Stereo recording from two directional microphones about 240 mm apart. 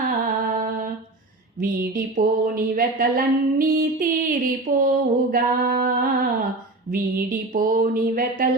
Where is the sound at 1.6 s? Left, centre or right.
Right.